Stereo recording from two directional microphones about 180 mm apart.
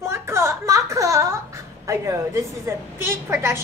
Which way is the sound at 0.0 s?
15° right (ahead or behind).